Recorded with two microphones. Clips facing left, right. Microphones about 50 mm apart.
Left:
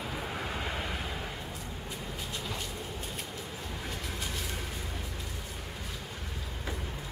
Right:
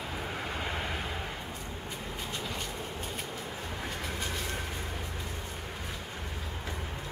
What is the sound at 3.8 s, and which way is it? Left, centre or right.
Vehicle, centre.